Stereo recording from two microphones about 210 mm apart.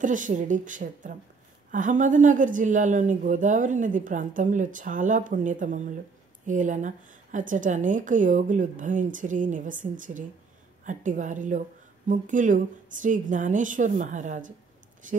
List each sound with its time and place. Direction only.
0.0 s a woman's voice: 40° right (ahead or behind)